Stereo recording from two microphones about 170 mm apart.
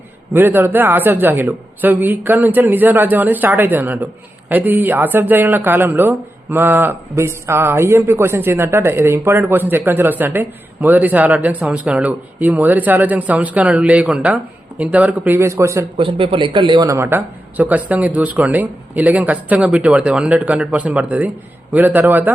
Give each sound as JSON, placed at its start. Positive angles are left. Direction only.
{"t": 0.3, "sound": "a man's voice", "side_deg": -10}
{"t": 16.0, "sound": "speech", "side_deg": -30}
{"t": 16.9, "sound": "a man's voice", "side_deg": -15}